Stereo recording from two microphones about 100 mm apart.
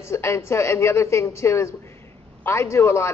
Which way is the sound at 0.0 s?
25° left (ahead or behind).